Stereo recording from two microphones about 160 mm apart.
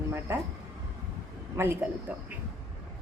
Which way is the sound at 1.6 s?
15° right (ahead or behind).